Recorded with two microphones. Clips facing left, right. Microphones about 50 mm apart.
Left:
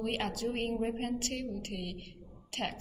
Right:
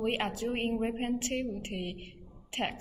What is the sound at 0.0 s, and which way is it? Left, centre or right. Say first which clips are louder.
A woman's voice: right 2 dB; right.